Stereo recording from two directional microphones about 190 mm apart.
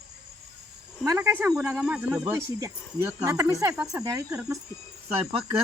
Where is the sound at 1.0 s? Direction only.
15° right (ahead or behind).